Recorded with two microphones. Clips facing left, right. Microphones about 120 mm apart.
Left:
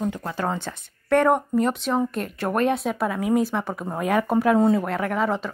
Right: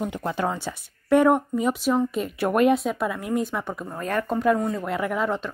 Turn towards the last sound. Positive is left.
turn(degrees=0)  # may be behind; listen again after turning